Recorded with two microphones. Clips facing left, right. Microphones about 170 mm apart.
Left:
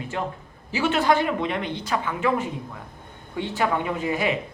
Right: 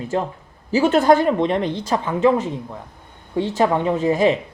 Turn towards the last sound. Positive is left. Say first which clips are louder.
# right 8 dB
turn(degrees=-35)  # may be behind; listen again after turning